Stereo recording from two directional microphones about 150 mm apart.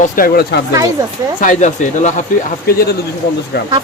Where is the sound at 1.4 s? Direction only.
55° left (ahead or behind).